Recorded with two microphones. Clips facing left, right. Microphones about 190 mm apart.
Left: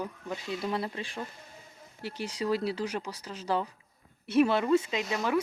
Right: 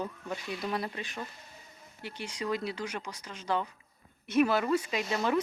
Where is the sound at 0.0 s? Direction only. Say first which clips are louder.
Even; 20° left (ahead or behind).